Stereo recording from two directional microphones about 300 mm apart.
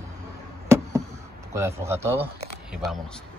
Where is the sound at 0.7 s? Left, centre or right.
Centre.